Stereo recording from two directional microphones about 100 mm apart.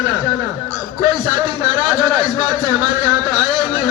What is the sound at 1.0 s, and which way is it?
A man's voice, 45° right (ahead or behind).